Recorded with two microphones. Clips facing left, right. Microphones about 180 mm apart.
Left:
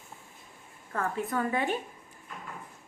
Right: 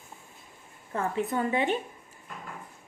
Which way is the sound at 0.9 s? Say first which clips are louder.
Right 2 dB; 25° right (ahead or behind).